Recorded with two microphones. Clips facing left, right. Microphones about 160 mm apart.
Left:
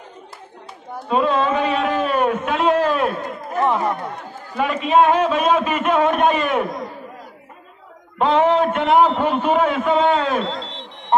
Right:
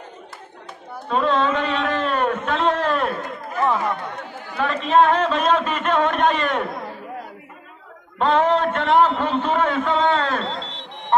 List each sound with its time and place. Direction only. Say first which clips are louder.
1.0 s a sound: left 2 dB; 10° left (ahead or behind)
3.5 s chatter: left 2 dB; 20° left (ahead or behind)
4.6 s a man's voice: left 1 dB; 10° left (ahead or behind)
8.2 s a man's voice: left 2 dB; 10° left (ahead or behind)